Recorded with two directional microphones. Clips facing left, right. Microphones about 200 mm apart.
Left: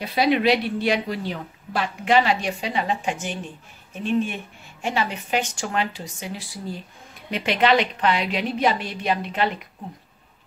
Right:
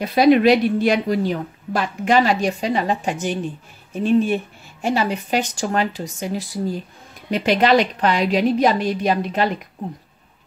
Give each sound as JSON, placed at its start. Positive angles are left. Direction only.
{"t": 0.0, "sound": "a woman's voice", "side_deg": -45}